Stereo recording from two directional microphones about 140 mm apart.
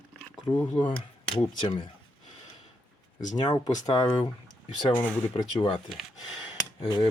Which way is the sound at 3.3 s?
30° left (ahead or behind).